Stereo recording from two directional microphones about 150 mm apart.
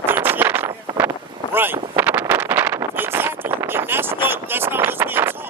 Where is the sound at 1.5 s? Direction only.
15° right (ahead or behind).